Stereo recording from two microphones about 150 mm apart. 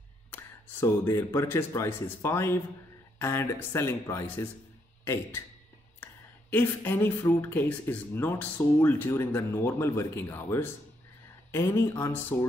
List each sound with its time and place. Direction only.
0.3 s a man's voice: 15° left (ahead or behind)
6.5 s speech: 15° left (ahead or behind)